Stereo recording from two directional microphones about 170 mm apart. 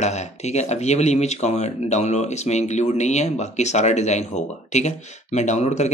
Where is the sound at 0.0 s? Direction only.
40° left (ahead or behind).